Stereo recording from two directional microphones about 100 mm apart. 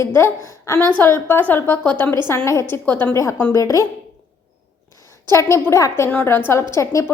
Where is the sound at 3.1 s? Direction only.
30° left (ahead or behind).